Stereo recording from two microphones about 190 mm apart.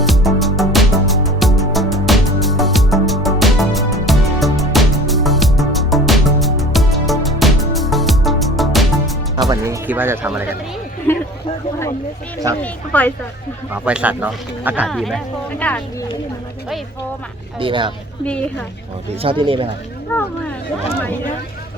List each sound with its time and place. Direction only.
0.0 s music: centre (ahead or behind)
9.5 s speech: 10° right (ahead or behind)
11.1 s a sound: 10° left (ahead or behind)
12.6 s a woman's voice: 10° left (ahead or behind)
13.7 s speech: 5° right (ahead or behind)
14.8 s speech: centre (ahead or behind)
17.6 s speech: 25° right (ahead or behind)
19.2 s speech: 25° right (ahead or behind)